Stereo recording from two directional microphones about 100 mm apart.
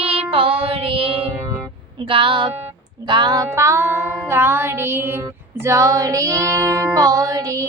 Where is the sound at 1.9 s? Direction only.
60° right (ahead or behind).